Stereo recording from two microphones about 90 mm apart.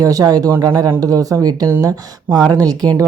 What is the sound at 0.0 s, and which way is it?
Speech, 40° right (ahead or behind).